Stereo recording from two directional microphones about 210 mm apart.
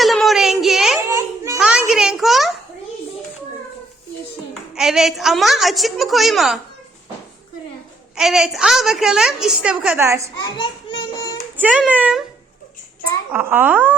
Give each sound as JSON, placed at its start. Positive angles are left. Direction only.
{"t": 0.0, "sound": "child singing", "side_deg": 0}
{"t": 1.6, "sound": "a sound", "side_deg": -5}
{"t": 4.7, "sound": "a woman's voice", "side_deg": 0}
{"t": 8.1, "sound": "a woman's voice", "side_deg": 0}
{"t": 10.4, "sound": "a sound", "side_deg": 25}
{"t": 11.5, "sound": "speech", "side_deg": -5}
{"t": 13.3, "sound": "speech", "side_deg": -10}